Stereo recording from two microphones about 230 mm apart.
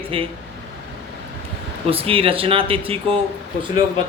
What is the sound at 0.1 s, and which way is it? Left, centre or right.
Speech, right.